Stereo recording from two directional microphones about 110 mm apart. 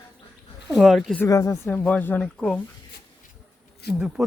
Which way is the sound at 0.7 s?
5° left (ahead or behind).